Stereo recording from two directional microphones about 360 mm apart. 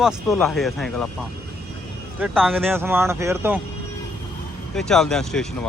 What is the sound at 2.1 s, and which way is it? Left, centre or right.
Speech, centre.